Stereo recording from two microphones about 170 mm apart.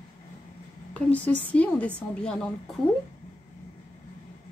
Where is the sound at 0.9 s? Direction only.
10° left (ahead or behind).